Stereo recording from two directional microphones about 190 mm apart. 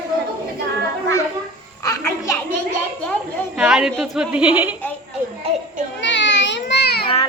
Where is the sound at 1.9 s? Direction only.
15° left (ahead or behind).